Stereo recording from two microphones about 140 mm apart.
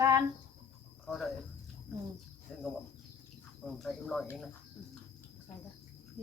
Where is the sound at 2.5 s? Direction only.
Centre (ahead or behind).